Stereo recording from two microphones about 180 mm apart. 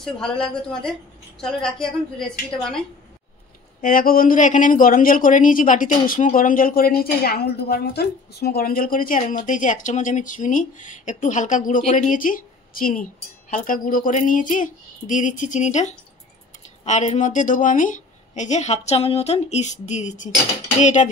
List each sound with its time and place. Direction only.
0.0 s a woman's voice: 5° left (ahead or behind)
3.8 s a woman's voice: 50° left (ahead or behind)